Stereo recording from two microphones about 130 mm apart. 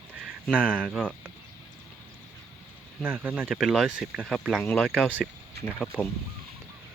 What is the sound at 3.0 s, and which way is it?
Speech, 15° right (ahead or behind).